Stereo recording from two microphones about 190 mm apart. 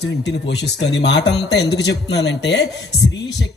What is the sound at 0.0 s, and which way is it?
A man's voice, 65° left (ahead or behind).